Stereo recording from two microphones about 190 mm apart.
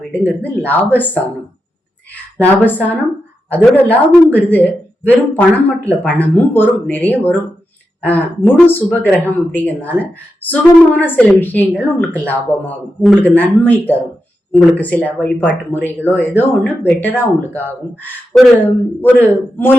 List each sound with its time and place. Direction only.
0.1 s speech: 10° left (ahead or behind)
2.4 s speech: 10° left (ahead or behind)